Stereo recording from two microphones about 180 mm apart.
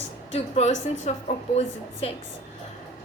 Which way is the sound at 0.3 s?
35° left (ahead or behind).